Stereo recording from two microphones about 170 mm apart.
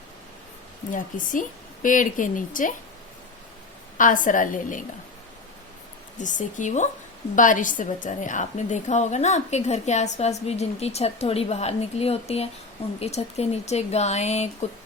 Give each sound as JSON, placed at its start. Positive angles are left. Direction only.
{"t": 0.9, "sound": "a woman's voice", "side_deg": 50}
{"t": 3.9, "sound": "a woman's voice", "side_deg": 50}
{"t": 6.1, "sound": "a woman's voice", "side_deg": 45}